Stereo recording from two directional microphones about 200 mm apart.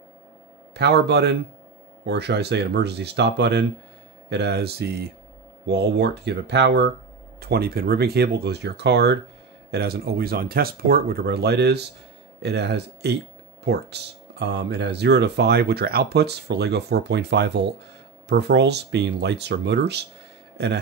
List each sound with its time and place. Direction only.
0.7 s a man's voice: 55° right (ahead or behind)